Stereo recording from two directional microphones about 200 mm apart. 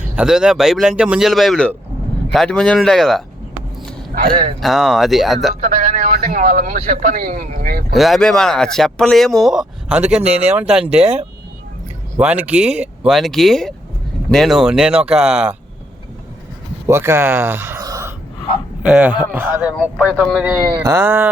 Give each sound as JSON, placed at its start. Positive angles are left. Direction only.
{"t": 0.2, "sound": "speech", "side_deg": -5}
{"t": 4.1, "sound": "a man's voice", "side_deg": -40}
{"t": 4.6, "sound": "speech", "side_deg": 0}
{"t": 5.6, "sound": "a man's voice", "side_deg": -40}
{"t": 7.9, "sound": "speech", "side_deg": 0}
{"t": 12.1, "sound": "speech", "side_deg": -5}
{"t": 16.8, "sound": "a man's voice", "side_deg": -10}
{"t": 20.7, "sound": "a man's voice", "side_deg": -15}